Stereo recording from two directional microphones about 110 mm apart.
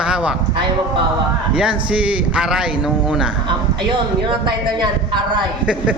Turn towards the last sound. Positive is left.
turn(degrees=-10)  # may be behind; listen again after turning